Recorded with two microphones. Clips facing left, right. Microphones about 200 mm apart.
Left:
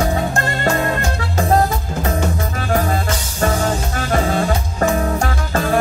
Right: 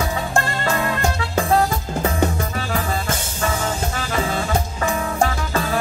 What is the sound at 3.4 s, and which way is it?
Music, 50° left (ahead or behind).